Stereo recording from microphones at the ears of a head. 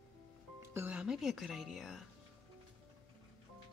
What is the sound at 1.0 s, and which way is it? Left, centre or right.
Speech, left.